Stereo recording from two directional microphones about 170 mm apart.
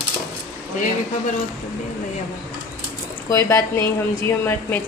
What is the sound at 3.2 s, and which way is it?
A woman's voice, 20° left (ahead or behind).